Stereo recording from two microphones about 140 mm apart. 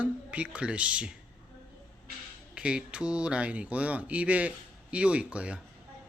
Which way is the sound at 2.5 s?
5° right (ahead or behind).